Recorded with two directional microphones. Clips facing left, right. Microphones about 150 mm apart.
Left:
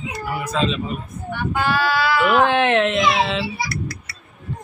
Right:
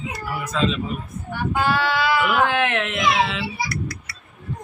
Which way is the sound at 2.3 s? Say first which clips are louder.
Left 4 dB; 30° left (ahead or behind).